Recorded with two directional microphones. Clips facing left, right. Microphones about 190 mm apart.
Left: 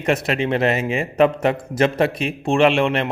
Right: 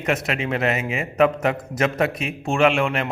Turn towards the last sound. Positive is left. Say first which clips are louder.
# left 3 dB
turn(degrees=30)  # may be behind; listen again after turning